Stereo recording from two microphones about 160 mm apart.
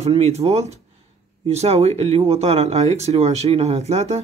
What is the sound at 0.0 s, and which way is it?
Speech, 40° right (ahead or behind).